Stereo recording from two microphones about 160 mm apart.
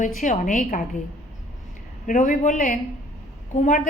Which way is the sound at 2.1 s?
55° left (ahead or behind).